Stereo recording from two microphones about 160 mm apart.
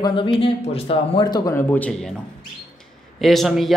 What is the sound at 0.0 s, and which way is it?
Speech, 30° left (ahead or behind).